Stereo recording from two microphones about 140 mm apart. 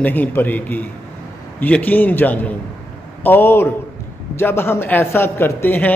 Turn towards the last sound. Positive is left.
turn(degrees=15)  # may be behind; listen again after turning